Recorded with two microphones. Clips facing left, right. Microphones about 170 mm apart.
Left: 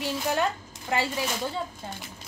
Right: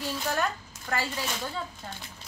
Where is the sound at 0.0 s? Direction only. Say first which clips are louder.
Left 3 dB; 20° left (ahead or behind).